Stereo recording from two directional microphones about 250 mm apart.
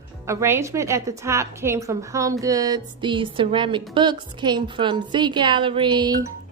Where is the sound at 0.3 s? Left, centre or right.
Centre.